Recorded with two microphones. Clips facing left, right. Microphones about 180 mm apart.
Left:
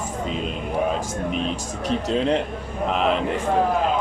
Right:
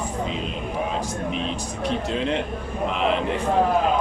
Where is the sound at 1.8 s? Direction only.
40° left (ahead or behind).